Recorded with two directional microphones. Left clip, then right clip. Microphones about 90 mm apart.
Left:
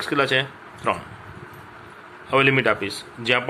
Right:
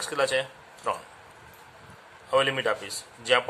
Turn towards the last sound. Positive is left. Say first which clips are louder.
# left 8 dB
turn(degrees=-20)  # may be behind; listen again after turning